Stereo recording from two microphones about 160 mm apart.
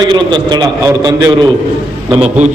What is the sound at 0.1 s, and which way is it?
Speech, 30° right (ahead or behind).